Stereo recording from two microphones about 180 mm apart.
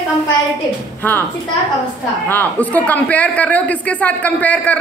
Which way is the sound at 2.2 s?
10° left (ahead or behind).